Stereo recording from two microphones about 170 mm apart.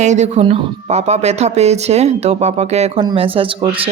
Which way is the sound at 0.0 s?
45° right (ahead or behind).